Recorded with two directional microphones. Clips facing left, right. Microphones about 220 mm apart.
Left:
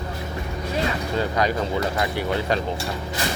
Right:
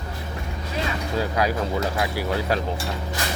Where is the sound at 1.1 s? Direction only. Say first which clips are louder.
Even; 5° right (ahead or behind).